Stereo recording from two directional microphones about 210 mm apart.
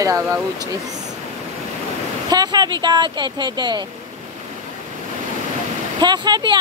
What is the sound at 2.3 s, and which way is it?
Speech, 20° right (ahead or behind).